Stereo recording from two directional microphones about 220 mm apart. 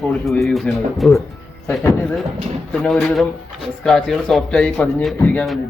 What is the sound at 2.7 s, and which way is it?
Speech, 5° left (ahead or behind).